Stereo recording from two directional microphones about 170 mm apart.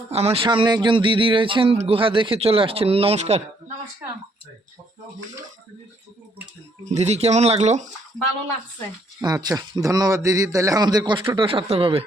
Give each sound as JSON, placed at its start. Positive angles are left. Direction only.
{"t": 0.1, "sound": "speech", "side_deg": -35}
{"t": 6.9, "sound": "speech", "side_deg": -40}
{"t": 9.2, "sound": "a man's voice", "side_deg": -20}